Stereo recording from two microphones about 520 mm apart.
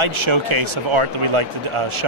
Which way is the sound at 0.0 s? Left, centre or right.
Right.